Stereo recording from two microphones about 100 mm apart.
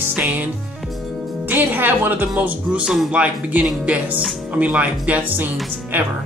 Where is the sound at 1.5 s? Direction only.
20° right (ahead or behind).